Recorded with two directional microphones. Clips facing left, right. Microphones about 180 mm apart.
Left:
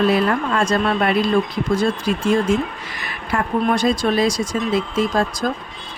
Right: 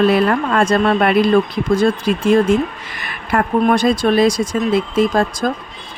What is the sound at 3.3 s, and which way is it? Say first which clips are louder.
Speech: right 4 dB; 55° right (ahead or behind).